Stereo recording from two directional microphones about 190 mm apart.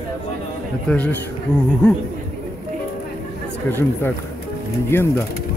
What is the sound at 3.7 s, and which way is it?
Speech, 10° left (ahead or behind).